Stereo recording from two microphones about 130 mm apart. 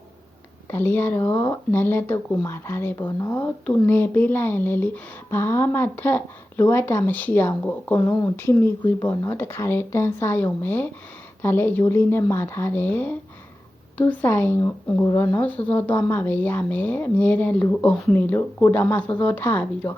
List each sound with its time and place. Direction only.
0.7 s speech: 15° left (ahead or behind)